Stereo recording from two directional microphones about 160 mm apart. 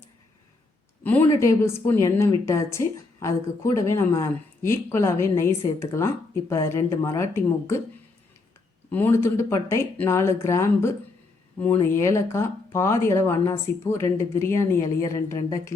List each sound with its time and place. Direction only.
1.3 s a woman's voice: 20° left (ahead or behind)
8.9 s a woman's voice: 15° left (ahead or behind)